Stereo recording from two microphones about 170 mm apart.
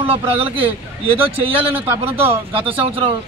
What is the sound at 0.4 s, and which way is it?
Speech, 35° right (ahead or behind).